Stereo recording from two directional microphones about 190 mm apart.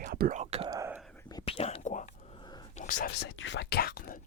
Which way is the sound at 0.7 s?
15° right (ahead or behind).